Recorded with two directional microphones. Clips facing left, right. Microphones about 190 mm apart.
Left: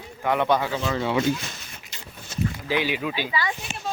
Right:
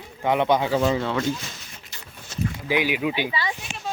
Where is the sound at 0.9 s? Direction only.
10° left (ahead or behind).